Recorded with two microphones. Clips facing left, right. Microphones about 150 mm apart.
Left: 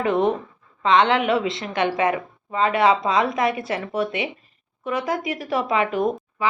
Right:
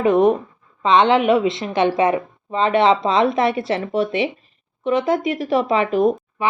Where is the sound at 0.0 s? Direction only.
20° right (ahead or behind).